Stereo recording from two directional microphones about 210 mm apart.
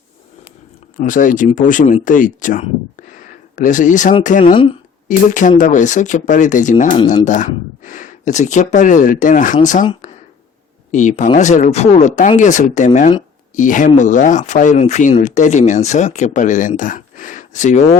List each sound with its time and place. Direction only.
0.9 s speech: 40° left (ahead or behind)
4.5 s speech: 25° left (ahead or behind)
5.0 s speech: 35° left (ahead or behind)
10.9 s speech: 35° left (ahead or behind)